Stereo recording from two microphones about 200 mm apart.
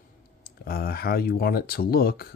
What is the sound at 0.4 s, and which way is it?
Speech, 50° left (ahead or behind).